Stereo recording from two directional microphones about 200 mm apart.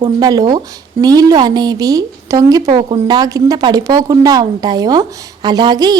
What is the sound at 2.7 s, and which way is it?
Speech, 30° right (ahead or behind).